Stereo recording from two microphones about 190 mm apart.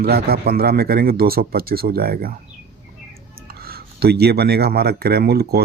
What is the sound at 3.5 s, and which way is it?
A man's voice, 55° right (ahead or behind).